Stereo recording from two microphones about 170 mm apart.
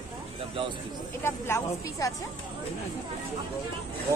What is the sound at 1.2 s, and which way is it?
Speech, 15° left (ahead or behind).